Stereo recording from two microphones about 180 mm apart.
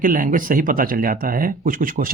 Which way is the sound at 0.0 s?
50° right (ahead or behind).